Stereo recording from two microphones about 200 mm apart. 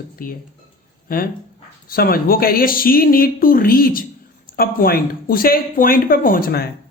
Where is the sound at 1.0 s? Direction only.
45° left (ahead or behind).